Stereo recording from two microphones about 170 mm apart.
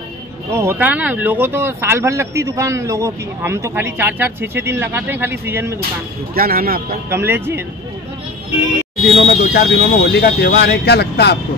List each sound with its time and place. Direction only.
0.5 s speech: 15° right (ahead or behind)
6.3 s speech: 60° right (ahead or behind)
7.1 s speech: 15° right (ahead or behind)
9.1 s speech: 40° left (ahead or behind)
9.5 s speech: 75° left (ahead or behind)